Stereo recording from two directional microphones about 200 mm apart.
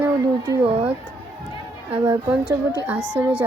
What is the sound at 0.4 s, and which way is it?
Speech, 25° right (ahead or behind).